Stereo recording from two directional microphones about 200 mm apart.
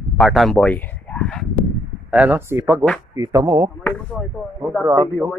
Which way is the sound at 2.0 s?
5° right (ahead or behind).